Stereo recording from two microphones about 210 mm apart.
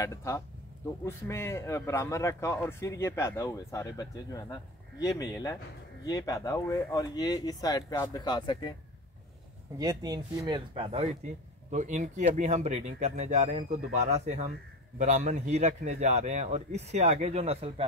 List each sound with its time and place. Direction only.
0.0 s a man's voice: 15° left (ahead or behind)
9.8 s a man's voice: 20° right (ahead or behind)